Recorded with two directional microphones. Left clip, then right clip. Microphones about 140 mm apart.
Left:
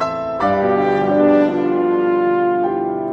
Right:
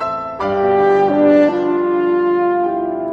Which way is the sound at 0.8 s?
15° left (ahead or behind).